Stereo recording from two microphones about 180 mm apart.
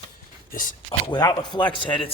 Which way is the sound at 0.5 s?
45° left (ahead or behind).